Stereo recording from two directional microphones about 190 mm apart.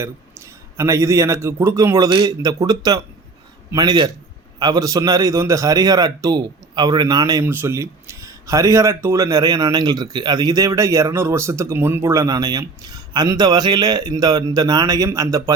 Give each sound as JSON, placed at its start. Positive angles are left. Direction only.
{"t": 0.0, "sound": "a man's voice", "side_deg": -15}